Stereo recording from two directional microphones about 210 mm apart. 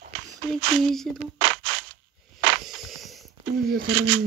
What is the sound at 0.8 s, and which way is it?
Speech, centre (ahead or behind).